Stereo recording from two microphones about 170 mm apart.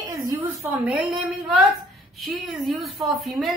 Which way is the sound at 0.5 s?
20° right (ahead or behind).